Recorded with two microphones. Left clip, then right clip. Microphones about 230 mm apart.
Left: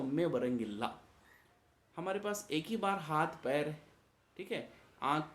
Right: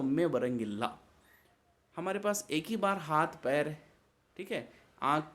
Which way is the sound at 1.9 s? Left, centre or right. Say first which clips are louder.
Right 4 dB; right.